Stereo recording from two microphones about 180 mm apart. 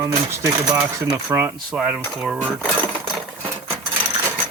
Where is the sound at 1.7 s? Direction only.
5° right (ahead or behind).